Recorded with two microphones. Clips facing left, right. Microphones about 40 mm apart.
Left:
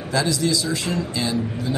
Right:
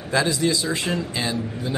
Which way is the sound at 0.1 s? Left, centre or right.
Right.